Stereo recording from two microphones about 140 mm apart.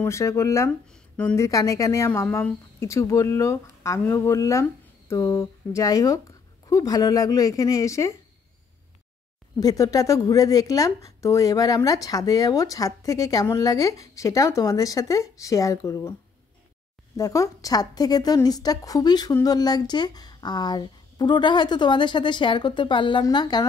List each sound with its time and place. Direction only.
0.0 s speech: 20° left (ahead or behind)
9.6 s speech: 25° left (ahead or behind)
17.2 s a woman's voice: 25° left (ahead or behind)